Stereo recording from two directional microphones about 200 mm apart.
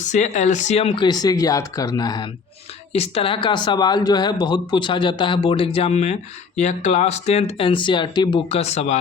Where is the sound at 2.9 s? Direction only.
30° left (ahead or behind).